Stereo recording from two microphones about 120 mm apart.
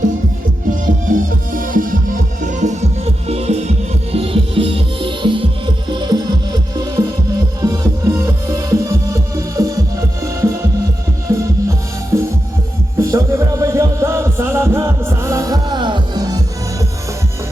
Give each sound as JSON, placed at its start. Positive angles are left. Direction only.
{"t": 0.7, "sound": "music", "side_deg": -90}
{"t": 2.4, "sound": "music", "side_deg": -90}
{"t": 15.7, "sound": "music", "side_deg": -40}